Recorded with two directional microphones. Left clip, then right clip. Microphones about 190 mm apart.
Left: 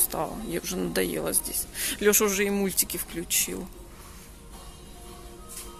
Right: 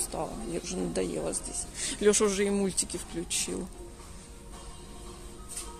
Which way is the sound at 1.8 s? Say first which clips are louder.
Left 2 dB; centre (ahead or behind).